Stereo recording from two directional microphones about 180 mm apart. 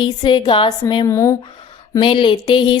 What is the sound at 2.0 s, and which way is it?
Speech, 25° left (ahead or behind).